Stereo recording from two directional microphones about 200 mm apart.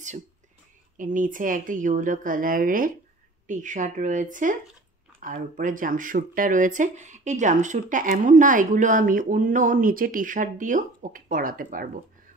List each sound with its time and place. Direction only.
0.9 s speech: 40° right (ahead or behind)